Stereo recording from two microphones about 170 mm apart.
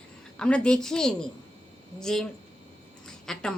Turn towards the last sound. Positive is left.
turn(degrees=5)  # may be behind; listen again after turning